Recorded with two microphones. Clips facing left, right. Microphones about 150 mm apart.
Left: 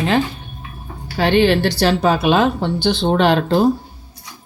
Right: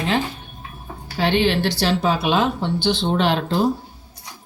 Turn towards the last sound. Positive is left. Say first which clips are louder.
# left 5 dB
turn(degrees=50)  # may be behind; listen again after turning